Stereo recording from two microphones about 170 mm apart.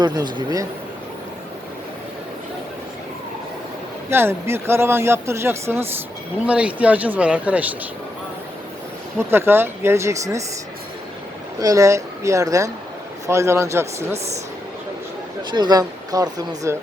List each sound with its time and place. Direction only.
0.0 s speech: 25° right (ahead or behind)
4.1 s speech: 15° right (ahead or behind)
9.1 s speech: 15° right (ahead or behind)
11.6 s speech: 20° right (ahead or behind)
15.5 s speech: 25° right (ahead or behind)